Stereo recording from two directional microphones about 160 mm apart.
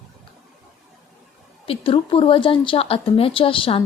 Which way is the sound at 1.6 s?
35° left (ahead or behind).